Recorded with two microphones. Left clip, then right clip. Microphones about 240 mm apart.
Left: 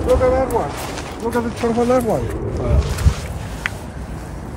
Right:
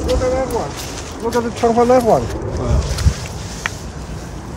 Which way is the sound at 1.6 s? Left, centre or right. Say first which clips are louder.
Right 5 dB; right.